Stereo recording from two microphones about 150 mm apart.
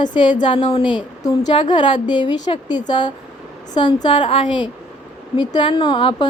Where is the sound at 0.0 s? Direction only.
30° left (ahead or behind).